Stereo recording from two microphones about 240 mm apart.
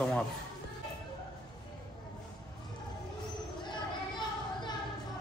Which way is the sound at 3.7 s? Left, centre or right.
Centre.